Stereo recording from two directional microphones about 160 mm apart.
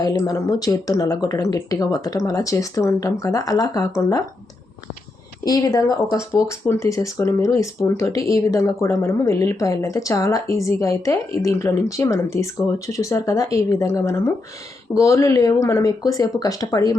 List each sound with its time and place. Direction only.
0.0 s speech: 25° left (ahead or behind)
5.5 s speech: 20° left (ahead or behind)